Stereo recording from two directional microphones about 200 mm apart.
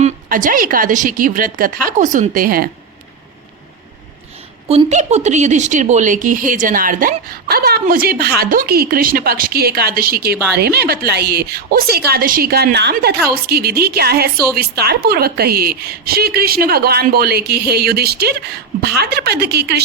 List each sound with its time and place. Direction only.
0.0 s a woman's voice: 40° right (ahead or behind)
4.7 s a woman's voice: 30° right (ahead or behind); by 19.8 s 55° right (ahead or behind)